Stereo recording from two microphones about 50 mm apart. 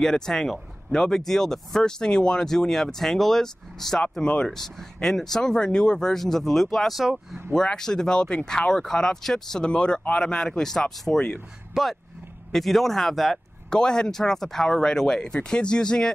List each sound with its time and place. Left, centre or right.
0.0 s speech: centre
4.1 s speech: centre
7.5 s speech: centre
11.7 s speech: centre
12.5 s speech: centre
13.7 s speech: centre